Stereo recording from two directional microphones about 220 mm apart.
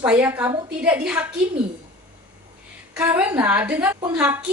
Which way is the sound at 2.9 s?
10° right (ahead or behind).